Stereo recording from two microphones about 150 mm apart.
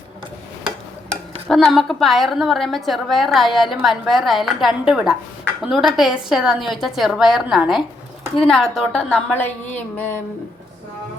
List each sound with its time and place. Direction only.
1.5 s a woman's voice: centre (ahead or behind)